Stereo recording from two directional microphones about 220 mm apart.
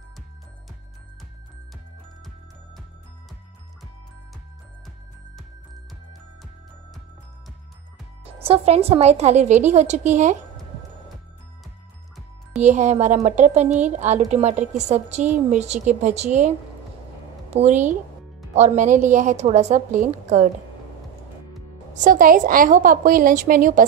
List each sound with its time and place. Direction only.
8.4 s a woman's voice: 25° right (ahead or behind)
12.5 s a woman's voice: 30° right (ahead or behind)
21.9 s a woman's voice: 35° right (ahead or behind)